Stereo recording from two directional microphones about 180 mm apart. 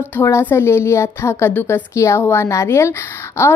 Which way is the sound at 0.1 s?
15° left (ahead or behind).